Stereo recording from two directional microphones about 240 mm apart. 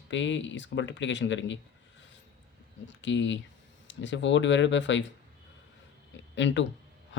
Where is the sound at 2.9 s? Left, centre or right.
Left.